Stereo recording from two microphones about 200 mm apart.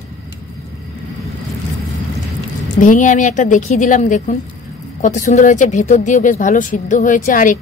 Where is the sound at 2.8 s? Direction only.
40° left (ahead or behind).